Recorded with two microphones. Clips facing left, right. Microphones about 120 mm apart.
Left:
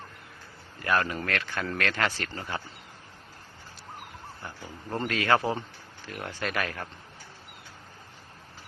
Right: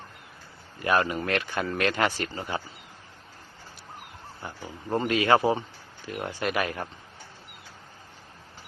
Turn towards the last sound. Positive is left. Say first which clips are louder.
# right 4 dB
turn(degrees=-15)  # may be behind; listen again after turning